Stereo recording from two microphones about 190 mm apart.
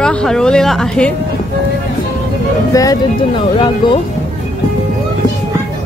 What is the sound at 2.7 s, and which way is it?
Speech, 20° left (ahead or behind).